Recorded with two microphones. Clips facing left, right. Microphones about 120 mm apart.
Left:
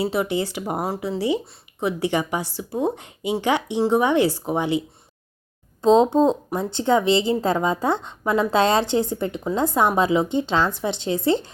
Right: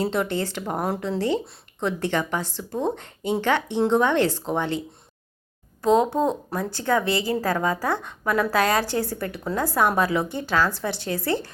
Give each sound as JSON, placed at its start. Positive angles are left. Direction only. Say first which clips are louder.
{"t": 0.0, "sound": "speech", "louder": "left 2 dB", "side_deg": 5}
{"t": 5.8, "sound": "speech", "louder": "left 4 dB", "side_deg": 20}